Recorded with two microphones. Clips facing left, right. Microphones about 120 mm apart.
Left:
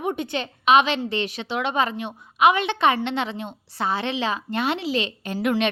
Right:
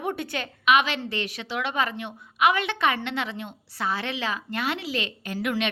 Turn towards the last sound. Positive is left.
turn(degrees=30)  # may be behind; listen again after turning